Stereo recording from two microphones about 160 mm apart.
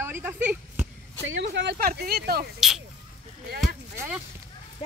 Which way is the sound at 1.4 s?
90° right.